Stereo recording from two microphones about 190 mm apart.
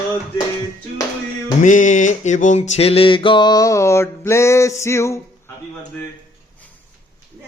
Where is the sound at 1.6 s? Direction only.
40° left (ahead or behind); by 5.2 s 15° left (ahead or behind).